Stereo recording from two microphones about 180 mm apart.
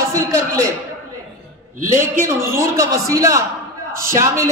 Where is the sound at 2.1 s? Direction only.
15° right (ahead or behind).